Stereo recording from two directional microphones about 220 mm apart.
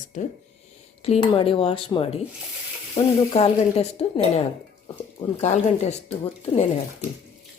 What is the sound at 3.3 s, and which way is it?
Speech, 25° left (ahead or behind).